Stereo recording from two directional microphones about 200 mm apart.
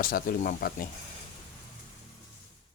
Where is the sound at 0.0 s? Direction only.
45° left (ahead or behind).